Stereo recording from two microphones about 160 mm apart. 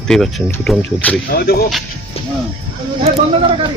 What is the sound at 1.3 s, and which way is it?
Speech, 75° left (ahead or behind).